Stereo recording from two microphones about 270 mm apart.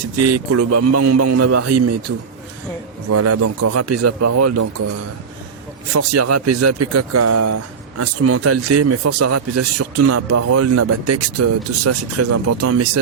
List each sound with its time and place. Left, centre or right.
0.3 s speech: right
3.1 s speech: right
5.9 s speech: right